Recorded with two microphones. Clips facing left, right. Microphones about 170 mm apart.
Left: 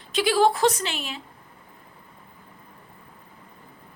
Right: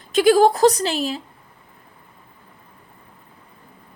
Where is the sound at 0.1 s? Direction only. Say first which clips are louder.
Right 6 dB; 45° right (ahead or behind).